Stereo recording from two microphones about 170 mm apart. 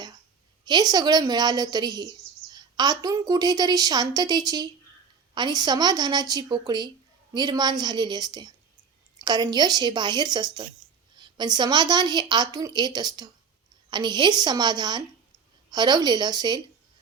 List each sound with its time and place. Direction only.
0.6 s a woman's voice: 25° right (ahead or behind)